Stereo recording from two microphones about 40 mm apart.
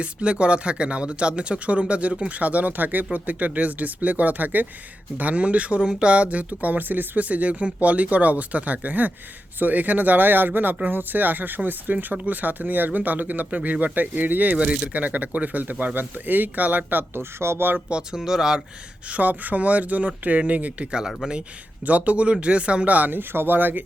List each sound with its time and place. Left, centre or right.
0.0 s speech: right
7.2 s speech: right
14.6 s speech: centre
14.9 s speech: right
17.2 s speech: right
17.7 s speech: right
18.1 s speech: centre
19.1 s speech: right
21.8 s speech: right
23.0 s speech: right
23.3 s speech: right